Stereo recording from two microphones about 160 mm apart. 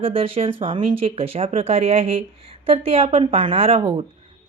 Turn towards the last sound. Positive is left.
turn(degrees=-35)  # may be behind; listen again after turning